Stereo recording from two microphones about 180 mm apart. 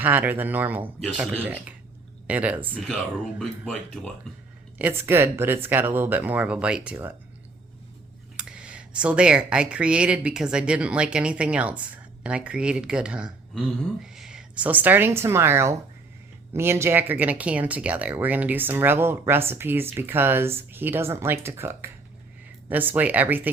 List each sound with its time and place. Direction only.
0.0 s speech: 10° right (ahead or behind)
4.8 s speech: 10° right (ahead or behind)
8.4 s speech: 5° right (ahead or behind)